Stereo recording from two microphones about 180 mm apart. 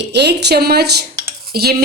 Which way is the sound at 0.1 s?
70° right (ahead or behind).